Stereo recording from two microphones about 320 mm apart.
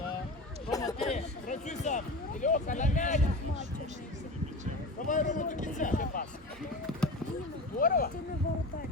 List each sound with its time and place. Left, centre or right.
0.7 s a sound: centre
1.0 s speech: left
4.9 s speech: left
7.8 s speech: left